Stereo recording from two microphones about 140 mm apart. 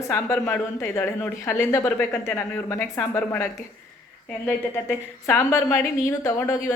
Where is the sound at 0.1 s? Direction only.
20° left (ahead or behind).